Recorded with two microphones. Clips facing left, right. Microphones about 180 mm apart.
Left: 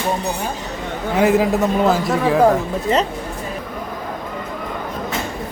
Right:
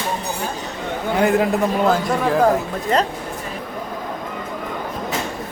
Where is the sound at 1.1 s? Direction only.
Centre (ahead or behind).